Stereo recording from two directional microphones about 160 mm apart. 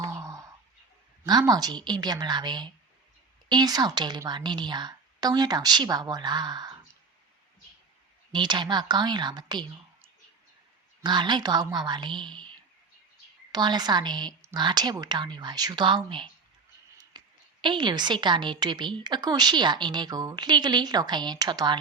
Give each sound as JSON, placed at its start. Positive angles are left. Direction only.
{"t": 0.0, "sound": "a sound", "side_deg": -20}
{"t": 1.2, "sound": "a woman's voice", "side_deg": -25}
{"t": 8.3, "sound": "a woman's voice", "side_deg": -30}
{"t": 11.0, "sound": "a woman's voice", "side_deg": -30}
{"t": 13.5, "sound": "a woman's voice", "side_deg": -25}